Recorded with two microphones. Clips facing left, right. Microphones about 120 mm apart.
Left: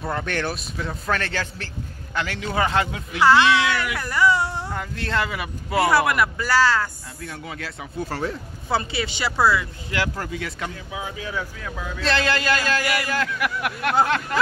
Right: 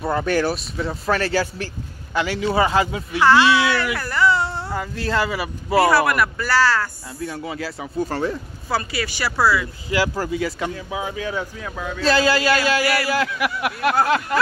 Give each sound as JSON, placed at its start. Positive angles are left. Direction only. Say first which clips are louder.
{"t": 0.0, "sound": "a man's voice", "louder": "right 6 dB", "side_deg": -5}
{"t": 4.0, "sound": "a sound", "louder": "left 1 dB", "side_deg": 15}
{"t": 4.6, "sound": "speech", "louder": "right 4 dB", "side_deg": -5}
{"t": 5.9, "sound": "speech", "louder": "right 2 dB", "side_deg": 15}
{"t": 7.2, "sound": "a man's voice", "louder": "right 6 dB", "side_deg": -5}
{"t": 8.6, "sound": "speech", "louder": "even", "side_deg": 20}
{"t": 9.5, "sound": "a man's voice", "louder": "right 2 dB", "side_deg": -5}